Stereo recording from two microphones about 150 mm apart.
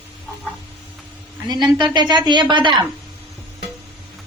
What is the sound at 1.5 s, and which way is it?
A woman's voice, 30° right (ahead or behind).